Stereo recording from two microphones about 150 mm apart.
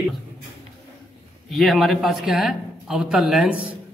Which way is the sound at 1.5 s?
Centre (ahead or behind).